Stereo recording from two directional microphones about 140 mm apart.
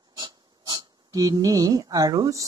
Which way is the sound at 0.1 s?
30° right (ahead or behind).